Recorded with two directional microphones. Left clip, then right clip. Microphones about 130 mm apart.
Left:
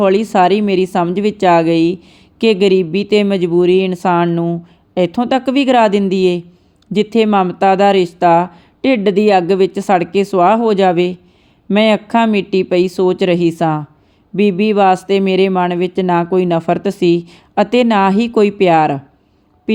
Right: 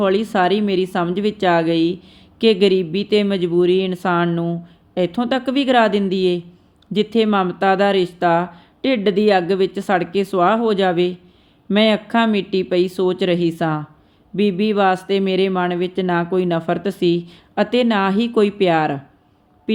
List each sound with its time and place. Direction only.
0.0 s speech: 45° left (ahead or behind)